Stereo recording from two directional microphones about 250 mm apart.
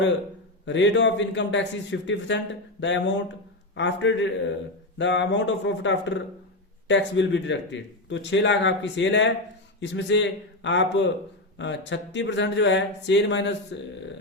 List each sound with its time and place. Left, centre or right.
0.6 s speech: left